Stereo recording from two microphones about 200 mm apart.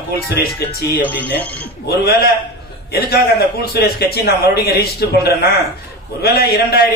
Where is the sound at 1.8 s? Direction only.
50° left (ahead or behind).